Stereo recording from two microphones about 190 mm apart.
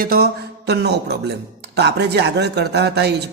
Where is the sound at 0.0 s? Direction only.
55° right (ahead or behind).